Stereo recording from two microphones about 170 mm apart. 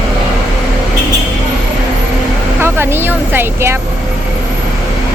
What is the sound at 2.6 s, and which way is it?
Speech, 15° right (ahead or behind).